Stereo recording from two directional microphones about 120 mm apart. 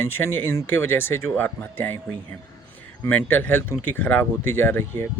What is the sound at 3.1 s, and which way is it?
Speech, 15° left (ahead or behind).